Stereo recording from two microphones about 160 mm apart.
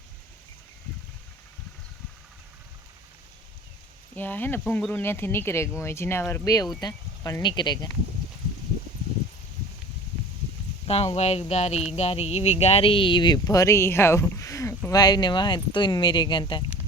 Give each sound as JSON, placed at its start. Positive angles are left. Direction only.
{"t": 4.1, "sound": "speech", "side_deg": 10}
{"t": 10.8, "sound": "speech", "side_deg": 40}